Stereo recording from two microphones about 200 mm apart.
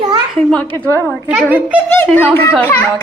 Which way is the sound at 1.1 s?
10° right (ahead or behind).